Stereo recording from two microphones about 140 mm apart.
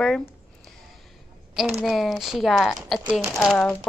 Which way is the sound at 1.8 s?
Centre (ahead or behind).